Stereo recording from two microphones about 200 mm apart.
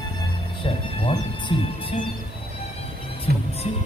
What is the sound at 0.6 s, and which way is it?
Music, 25° left (ahead or behind).